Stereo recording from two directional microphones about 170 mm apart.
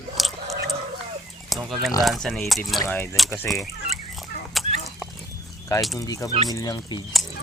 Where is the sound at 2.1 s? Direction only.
Centre (ahead or behind).